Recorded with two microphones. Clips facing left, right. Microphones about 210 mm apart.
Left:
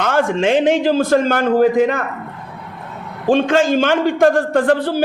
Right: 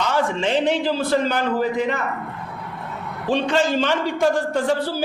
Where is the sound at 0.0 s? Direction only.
50° left (ahead or behind).